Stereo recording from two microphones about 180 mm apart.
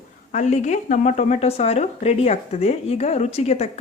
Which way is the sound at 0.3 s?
40° left (ahead or behind).